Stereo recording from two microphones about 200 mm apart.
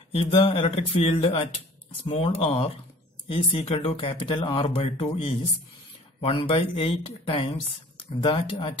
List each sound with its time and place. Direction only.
0.1 s speech: 30° left (ahead or behind)